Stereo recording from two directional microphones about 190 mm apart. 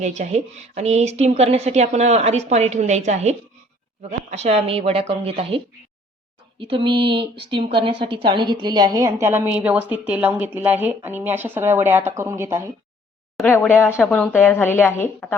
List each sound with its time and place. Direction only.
0.0 s a woman's voice: 35° right (ahead or behind); by 12.7 s 15° right (ahead or behind)
13.3 s speech: 10° left (ahead or behind)